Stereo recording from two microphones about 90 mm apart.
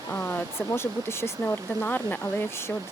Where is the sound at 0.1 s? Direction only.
25° left (ahead or behind).